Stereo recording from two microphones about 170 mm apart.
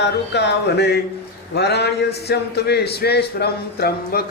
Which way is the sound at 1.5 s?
75° left (ahead or behind).